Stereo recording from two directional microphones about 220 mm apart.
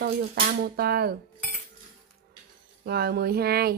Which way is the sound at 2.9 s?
45° right (ahead or behind).